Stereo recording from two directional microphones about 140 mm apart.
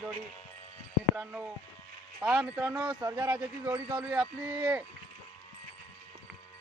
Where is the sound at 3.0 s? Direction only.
20° right (ahead or behind).